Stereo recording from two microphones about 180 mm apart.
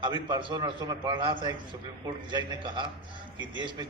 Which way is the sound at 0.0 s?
25° right (ahead or behind).